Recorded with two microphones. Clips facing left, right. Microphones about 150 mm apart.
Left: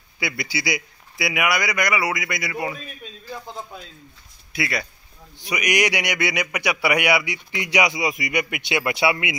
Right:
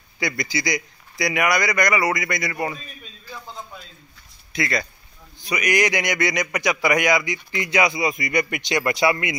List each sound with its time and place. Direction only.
0.2 s speech: 5° left (ahead or behind)
4.5 s a man's voice: 10° left (ahead or behind)